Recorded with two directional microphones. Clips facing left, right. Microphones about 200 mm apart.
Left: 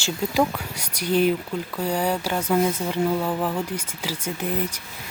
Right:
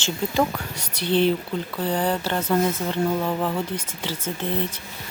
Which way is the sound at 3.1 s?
Centre (ahead or behind).